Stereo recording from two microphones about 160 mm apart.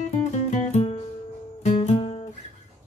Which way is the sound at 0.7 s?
40° left (ahead or behind).